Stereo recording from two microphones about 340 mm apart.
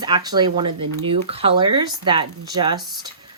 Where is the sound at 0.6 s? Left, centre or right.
Right.